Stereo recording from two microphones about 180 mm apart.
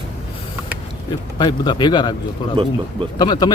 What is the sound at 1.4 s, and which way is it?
Speech, 25° left (ahead or behind).